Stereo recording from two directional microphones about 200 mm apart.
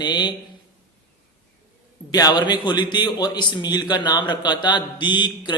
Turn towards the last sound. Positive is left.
turn(degrees=25)  # may be behind; listen again after turning